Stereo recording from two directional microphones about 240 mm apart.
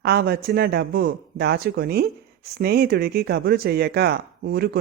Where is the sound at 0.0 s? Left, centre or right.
Right.